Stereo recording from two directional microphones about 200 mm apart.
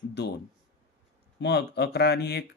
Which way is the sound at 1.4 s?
55° left (ahead or behind).